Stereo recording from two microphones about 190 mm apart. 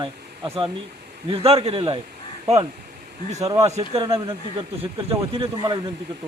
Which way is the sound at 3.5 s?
20° right (ahead or behind).